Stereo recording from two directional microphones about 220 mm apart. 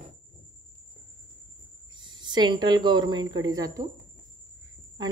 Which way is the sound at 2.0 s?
20° right (ahead or behind).